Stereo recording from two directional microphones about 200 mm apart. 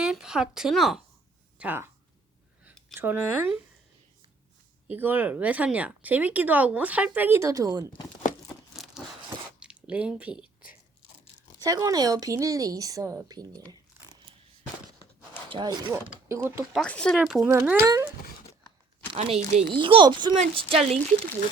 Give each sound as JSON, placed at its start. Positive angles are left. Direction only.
{"t": 0.0, "sound": "speech", "side_deg": -5}
{"t": 2.9, "sound": "speech", "side_deg": -10}
{"t": 4.9, "sound": "speech", "side_deg": -10}
{"t": 8.4, "sound": "tearing", "side_deg": 0}
{"t": 9.6, "sound": "squish", "side_deg": -5}
{"t": 11.6, "sound": "speech", "side_deg": -20}
{"t": 15.4, "sound": "speech", "side_deg": -20}
{"t": 16.7, "sound": "speech", "side_deg": 5}
{"t": 19.1, "sound": "speech", "side_deg": -30}